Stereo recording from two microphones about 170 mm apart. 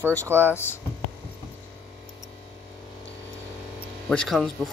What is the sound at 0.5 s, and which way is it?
Speech, 15° left (ahead or behind).